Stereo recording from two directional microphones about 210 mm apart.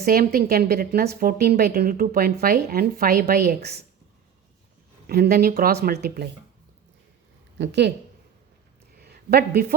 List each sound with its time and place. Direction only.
0.0 s speech: 45° right (ahead or behind)
5.0 s speech: 45° right (ahead or behind)
7.6 s speech: 55° right (ahead or behind)
9.0 s a sound: 50° right (ahead or behind)